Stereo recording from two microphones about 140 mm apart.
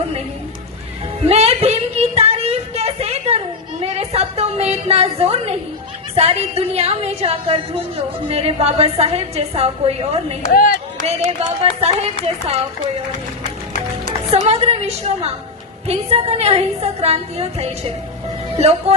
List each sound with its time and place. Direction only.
1.3 s a sound: 45° right (ahead or behind)
6.1 s a woman's voice: 45° right (ahead or behind)
10.5 s speech: 90° left
11.0 s a woman's voice: 45° right (ahead or behind)
14.4 s a woman's voice: 50° right (ahead or behind)